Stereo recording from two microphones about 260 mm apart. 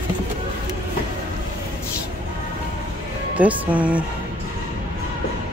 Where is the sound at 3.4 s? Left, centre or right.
Centre.